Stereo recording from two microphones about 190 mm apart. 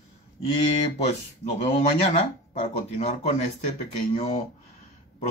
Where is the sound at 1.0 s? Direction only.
35° left (ahead or behind).